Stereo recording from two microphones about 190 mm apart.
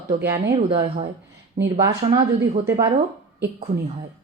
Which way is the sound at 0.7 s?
30° right (ahead or behind).